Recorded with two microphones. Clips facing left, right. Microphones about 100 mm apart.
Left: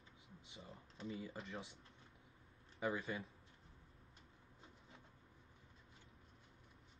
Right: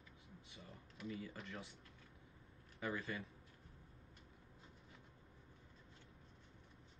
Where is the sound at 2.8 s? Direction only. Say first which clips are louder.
Left 2 dB; 20° left (ahead or behind).